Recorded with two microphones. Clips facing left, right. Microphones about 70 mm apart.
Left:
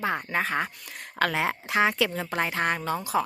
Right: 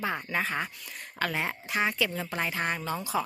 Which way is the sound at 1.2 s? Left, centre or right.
Left.